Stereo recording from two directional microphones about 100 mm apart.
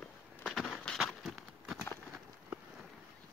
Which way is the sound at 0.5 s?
Centre (ahead or behind).